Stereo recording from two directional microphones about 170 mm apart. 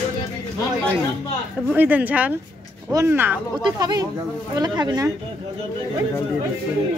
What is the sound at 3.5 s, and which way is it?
Speech, 25° right (ahead or behind).